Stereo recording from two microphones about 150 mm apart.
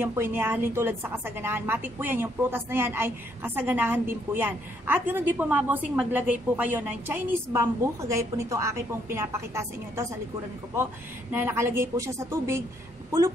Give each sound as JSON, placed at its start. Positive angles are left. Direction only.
{"t": 0.0, "sound": "a woman's voice", "side_deg": -15}
{"t": 11.3, "sound": "a woman's voice", "side_deg": -15}